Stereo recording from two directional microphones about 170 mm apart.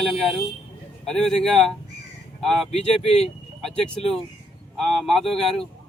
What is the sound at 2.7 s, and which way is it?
Speech, 35° left (ahead or behind).